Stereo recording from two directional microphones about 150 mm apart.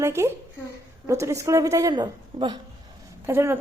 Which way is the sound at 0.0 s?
20° right (ahead or behind).